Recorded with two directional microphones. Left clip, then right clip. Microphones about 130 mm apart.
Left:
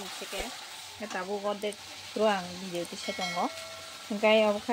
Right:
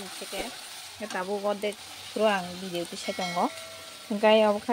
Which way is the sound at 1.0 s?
25° right (ahead or behind).